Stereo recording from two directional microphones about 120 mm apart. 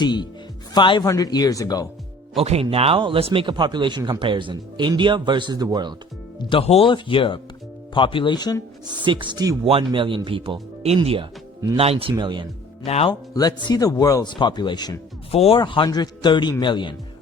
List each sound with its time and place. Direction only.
0.0 s speech: 35° left (ahead or behind)
2.4 s speech: 55° right (ahead or behind); by 5.6 s 40° right (ahead or behind)
6.4 s speech: 45° left (ahead or behind)
9.0 s speech: 40° right (ahead or behind)
9.6 s speech: 45° right (ahead or behind)
10.8 s speech: 55° right (ahead or behind)
12.1 s speech: 40° right (ahead or behind)
12.8 s speech: 60° left (ahead or behind)
13.3 s speech: 30° left (ahead or behind)
15.3 s speech: 55° left (ahead or behind)